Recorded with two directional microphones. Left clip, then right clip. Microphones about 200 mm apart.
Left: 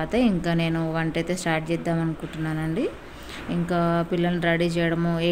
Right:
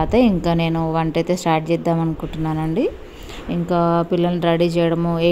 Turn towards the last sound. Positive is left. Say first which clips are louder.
# right 6 dB
turn(degrees=-20)  # may be behind; listen again after turning